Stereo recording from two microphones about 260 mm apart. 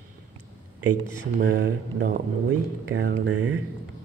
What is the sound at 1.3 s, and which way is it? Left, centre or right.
A man's voice, right.